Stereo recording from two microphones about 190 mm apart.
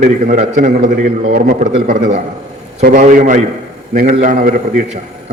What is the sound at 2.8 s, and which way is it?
A man's voice, 45° right (ahead or behind).